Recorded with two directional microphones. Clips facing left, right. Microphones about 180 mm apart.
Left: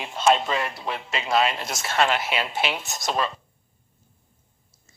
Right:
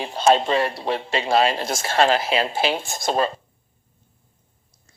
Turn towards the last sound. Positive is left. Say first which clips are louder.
# right 4 dB
turn(degrees=-30)  # may be behind; listen again after turning